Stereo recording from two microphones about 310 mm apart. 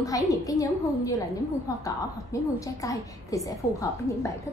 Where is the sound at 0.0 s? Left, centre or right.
Centre.